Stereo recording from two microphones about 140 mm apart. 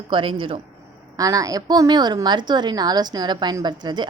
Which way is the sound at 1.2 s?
25° right (ahead or behind).